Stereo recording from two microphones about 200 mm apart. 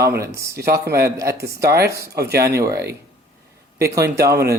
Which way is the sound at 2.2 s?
50° right (ahead or behind).